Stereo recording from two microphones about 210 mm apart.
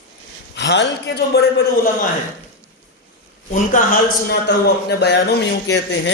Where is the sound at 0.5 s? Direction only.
55° left (ahead or behind).